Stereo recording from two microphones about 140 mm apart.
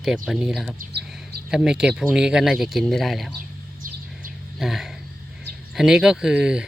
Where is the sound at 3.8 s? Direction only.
75° right (ahead or behind).